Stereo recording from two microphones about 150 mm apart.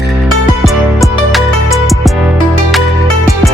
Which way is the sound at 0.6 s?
Centre (ahead or behind).